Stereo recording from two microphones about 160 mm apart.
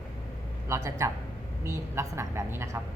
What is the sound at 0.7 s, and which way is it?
A woman's voice, 20° right (ahead or behind).